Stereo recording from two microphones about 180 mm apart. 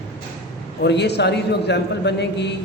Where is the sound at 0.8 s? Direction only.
70° left (ahead or behind).